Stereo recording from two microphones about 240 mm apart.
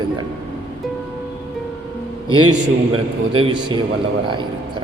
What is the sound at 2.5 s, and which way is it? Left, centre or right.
A man's voice, right.